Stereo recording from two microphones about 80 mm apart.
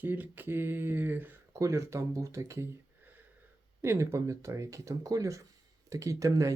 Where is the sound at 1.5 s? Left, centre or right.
Right.